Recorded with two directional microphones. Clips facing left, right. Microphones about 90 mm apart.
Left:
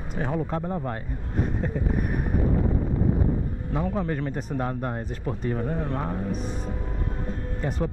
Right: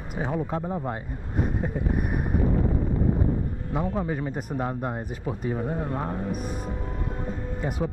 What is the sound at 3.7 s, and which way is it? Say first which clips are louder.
Speech: even; 10° right (ahead or behind).